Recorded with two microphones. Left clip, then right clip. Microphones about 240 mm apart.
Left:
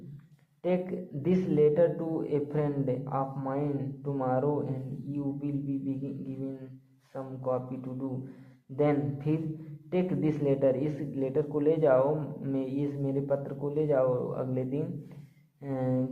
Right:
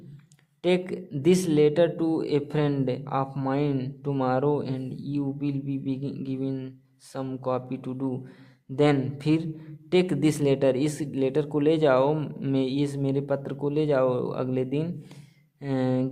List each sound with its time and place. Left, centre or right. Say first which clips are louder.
0.6 s speech: right 5 dB; right